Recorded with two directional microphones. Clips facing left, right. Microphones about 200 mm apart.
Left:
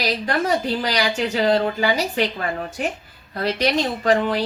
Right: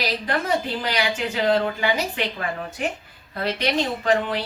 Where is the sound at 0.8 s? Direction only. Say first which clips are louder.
Left 3 dB; 40° left (ahead or behind).